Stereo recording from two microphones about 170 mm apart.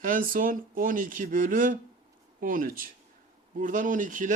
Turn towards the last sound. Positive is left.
turn(degrees=-50)  # may be behind; listen again after turning